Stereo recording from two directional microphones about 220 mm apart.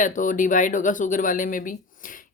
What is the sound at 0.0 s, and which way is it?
Speech, 35° left (ahead or behind).